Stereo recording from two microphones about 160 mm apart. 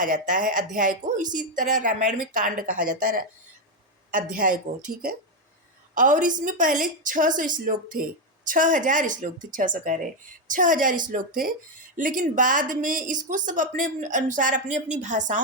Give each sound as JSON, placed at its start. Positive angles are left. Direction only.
{"t": 0.0, "sound": "a woman's voice", "side_deg": -55}
{"t": 5.9, "sound": "a woman's voice", "side_deg": -55}